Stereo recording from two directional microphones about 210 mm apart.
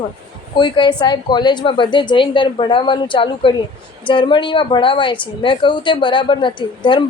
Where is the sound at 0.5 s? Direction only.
20° left (ahead or behind).